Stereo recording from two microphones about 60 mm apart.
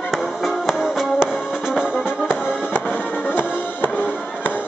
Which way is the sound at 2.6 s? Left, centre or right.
Left.